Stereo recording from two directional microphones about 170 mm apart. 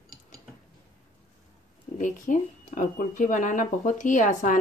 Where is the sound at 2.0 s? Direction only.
50° left (ahead or behind).